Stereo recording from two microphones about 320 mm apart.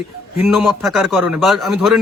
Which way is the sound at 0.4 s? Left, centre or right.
Centre.